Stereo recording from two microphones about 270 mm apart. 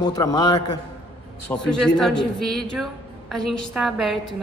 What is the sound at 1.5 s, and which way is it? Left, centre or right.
A woman's voice, centre.